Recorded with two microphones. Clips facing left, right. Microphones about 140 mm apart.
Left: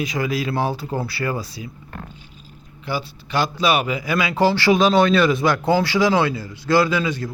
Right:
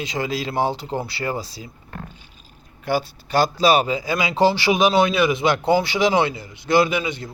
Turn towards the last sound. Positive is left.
turn(degrees=-20)  # may be behind; listen again after turning